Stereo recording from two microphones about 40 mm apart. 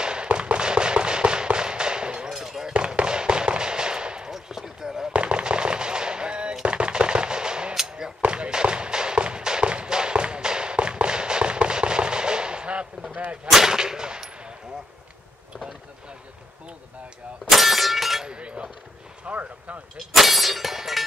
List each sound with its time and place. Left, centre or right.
0.0 s firecracker: right
2.9 s fireworks: centre
4.3 s basketball bounce: centre
5.1 s firecracker: right
6.6 s machine gun: right
8.2 s a sound: right
13.1 s artillery fire: right
13.5 s clang: centre
17.5 s a sound: centre
18.2 s a sound: right
19.2 s a sound: right
20.0 s clang: centre